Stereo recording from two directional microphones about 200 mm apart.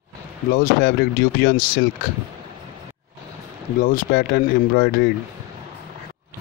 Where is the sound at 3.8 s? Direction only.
45° left (ahead or behind).